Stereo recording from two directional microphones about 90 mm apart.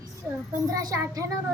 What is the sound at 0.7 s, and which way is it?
Speech, 40° right (ahead or behind).